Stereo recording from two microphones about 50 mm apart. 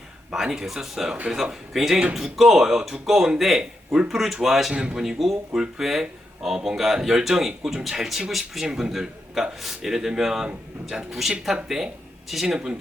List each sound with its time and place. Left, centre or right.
0.3 s speech: centre
4.7 s speech: centre